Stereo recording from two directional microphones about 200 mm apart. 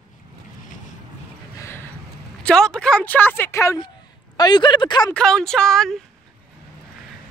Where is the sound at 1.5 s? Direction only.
10° left (ahead or behind).